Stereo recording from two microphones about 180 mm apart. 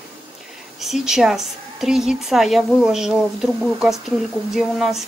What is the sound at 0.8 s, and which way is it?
A woman's voice, centre (ahead or behind).